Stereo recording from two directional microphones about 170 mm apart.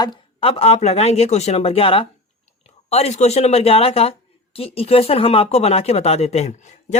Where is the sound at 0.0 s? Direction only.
30° left (ahead or behind).